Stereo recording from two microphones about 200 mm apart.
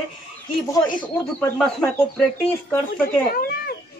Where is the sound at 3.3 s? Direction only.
50° left (ahead or behind).